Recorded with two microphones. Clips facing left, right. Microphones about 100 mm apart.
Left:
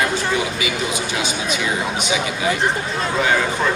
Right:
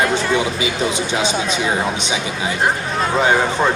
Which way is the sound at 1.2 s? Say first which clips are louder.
Right 4 dB; 30° right (ahead or behind).